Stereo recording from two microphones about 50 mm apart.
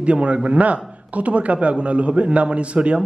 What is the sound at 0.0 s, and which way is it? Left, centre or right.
A man's voice, right.